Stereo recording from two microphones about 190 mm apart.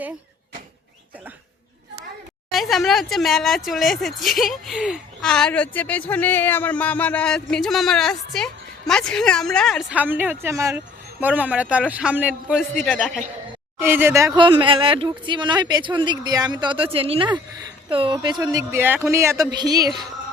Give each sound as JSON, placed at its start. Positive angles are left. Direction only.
{"t": 2.5, "sound": "speech", "side_deg": 0}
{"t": 9.9, "sound": "speech", "side_deg": -10}
{"t": 12.8, "sound": "speech", "side_deg": 5}
{"t": 13.7, "sound": "speech", "side_deg": -10}